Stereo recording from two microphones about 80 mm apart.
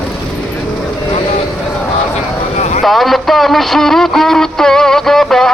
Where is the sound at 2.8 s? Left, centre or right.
Centre.